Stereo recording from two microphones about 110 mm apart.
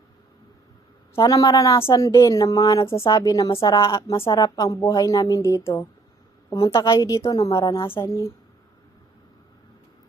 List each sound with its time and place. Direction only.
1.2 s a woman's voice: 30° left (ahead or behind)